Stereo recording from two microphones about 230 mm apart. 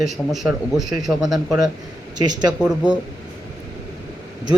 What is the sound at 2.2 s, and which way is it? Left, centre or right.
Speech, centre.